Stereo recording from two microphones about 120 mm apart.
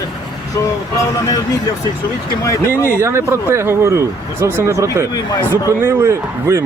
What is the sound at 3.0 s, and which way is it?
Speech, 20° right (ahead or behind).